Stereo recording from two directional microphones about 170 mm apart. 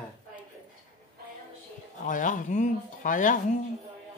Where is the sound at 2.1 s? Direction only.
50° left (ahead or behind).